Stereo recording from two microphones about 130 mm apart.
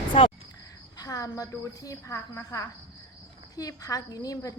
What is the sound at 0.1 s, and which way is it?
Speech, 50° left (ahead or behind).